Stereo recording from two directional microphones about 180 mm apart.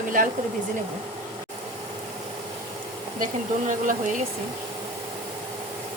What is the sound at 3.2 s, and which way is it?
Speech, 45° right (ahead or behind).